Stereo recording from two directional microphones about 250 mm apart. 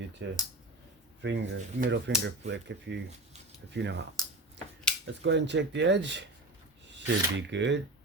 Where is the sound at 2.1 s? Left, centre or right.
Right.